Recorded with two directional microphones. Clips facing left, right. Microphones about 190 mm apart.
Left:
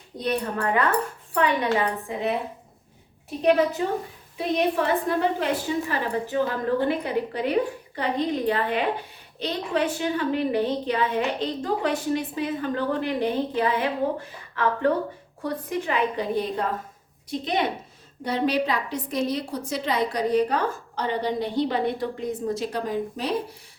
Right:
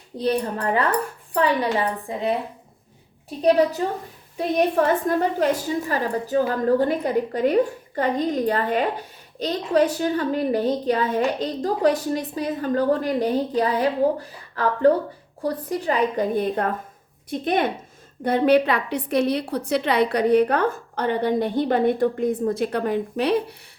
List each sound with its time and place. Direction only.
0.2 s a woman's voice: 30° right (ahead or behind)
3.4 s a woman's voice: 35° right (ahead or behind); by 23.6 s 65° right (ahead or behind)